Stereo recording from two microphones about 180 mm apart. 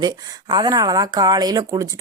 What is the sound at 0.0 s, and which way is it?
Speech, 25° right (ahead or behind).